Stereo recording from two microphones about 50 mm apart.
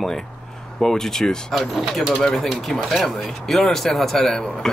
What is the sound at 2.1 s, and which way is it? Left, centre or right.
Speech, centre.